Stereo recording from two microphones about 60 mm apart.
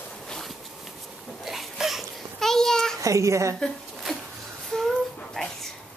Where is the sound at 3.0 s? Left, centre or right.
Right.